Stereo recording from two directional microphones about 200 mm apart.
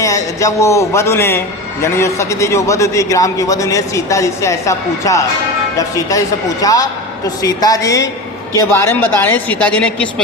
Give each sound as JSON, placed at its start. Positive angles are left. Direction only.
{"t": 0.0, "sound": "a man's voice", "side_deg": 15}